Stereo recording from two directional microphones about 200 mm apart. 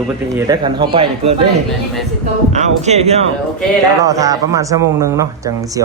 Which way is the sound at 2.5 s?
35° right (ahead or behind).